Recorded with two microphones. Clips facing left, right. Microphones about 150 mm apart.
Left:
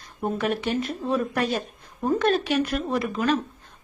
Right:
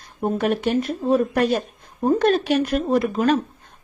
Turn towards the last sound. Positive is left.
turn(degrees=-40)  # may be behind; listen again after turning